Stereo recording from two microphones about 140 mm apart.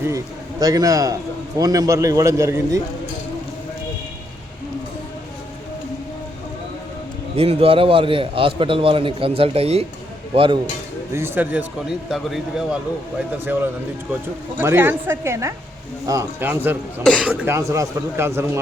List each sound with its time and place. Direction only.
0.6 s a man's voice: 25° right (ahead or behind)
7.3 s a man's voice: 45° right (ahead or behind)
11.1 s speech: 15° right (ahead or behind)
14.6 s speech: 15° right (ahead or behind)
17.0 s speech: 5° left (ahead or behind)
17.2 s speech: 10° right (ahead or behind)